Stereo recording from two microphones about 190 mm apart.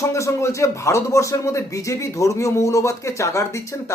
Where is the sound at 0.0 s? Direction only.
15° left (ahead or behind).